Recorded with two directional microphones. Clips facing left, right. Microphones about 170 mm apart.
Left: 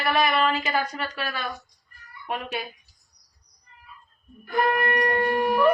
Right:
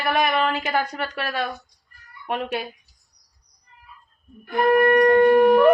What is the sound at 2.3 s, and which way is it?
Speech, 65° right (ahead or behind).